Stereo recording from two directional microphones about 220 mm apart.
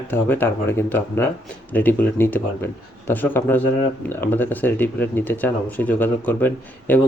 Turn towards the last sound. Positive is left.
turn(degrees=10)  # may be behind; listen again after turning